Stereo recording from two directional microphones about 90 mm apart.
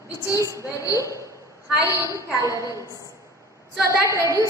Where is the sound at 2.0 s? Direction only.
35° right (ahead or behind).